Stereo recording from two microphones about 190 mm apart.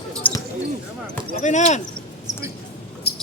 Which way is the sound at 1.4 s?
40° left (ahead or behind).